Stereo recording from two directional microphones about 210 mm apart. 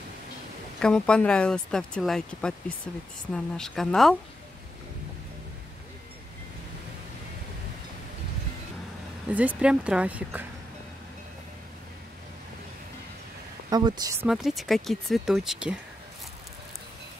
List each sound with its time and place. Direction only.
0.7 s speech: 5° left (ahead or behind)
9.3 s speech: 5° right (ahead or behind)
13.7 s speech: 20° right (ahead or behind)
14.2 s speech: centre (ahead or behind)